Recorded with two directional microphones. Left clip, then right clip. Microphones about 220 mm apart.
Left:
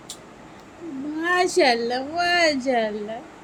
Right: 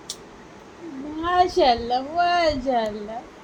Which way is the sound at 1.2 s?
15° left (ahead or behind).